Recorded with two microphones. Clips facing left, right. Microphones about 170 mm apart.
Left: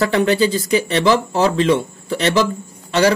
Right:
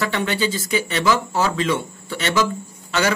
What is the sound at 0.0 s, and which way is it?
Speech, 40° left (ahead or behind).